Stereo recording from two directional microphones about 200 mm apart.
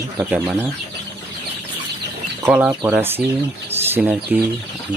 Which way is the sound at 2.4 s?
10° right (ahead or behind).